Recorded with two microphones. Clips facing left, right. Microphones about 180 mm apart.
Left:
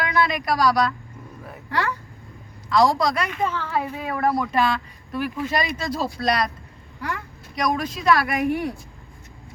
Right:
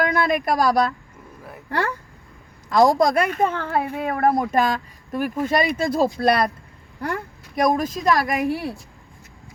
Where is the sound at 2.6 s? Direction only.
45° right (ahead or behind).